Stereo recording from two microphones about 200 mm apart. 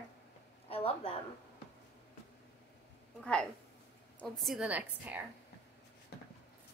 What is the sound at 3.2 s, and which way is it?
A woman's voice, 5° left (ahead or behind).